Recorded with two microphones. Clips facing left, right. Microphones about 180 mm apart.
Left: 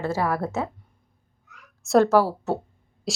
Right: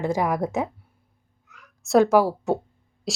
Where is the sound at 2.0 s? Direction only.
15° right (ahead or behind).